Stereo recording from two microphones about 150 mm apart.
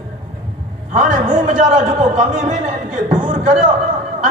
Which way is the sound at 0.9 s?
55° right (ahead or behind).